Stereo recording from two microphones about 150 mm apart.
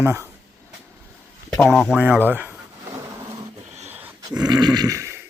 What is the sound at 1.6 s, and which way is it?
Speech, centre (ahead or behind).